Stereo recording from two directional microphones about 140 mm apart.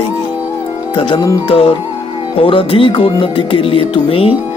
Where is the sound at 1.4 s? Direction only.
40° left (ahead or behind).